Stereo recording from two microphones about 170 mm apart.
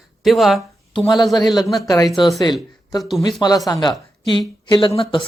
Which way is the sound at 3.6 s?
20° left (ahead or behind).